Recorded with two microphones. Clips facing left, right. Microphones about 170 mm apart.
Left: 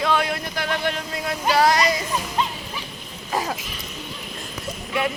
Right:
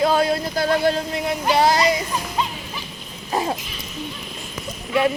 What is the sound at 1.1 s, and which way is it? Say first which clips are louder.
Music: right 2 dB; 20° right (ahead or behind).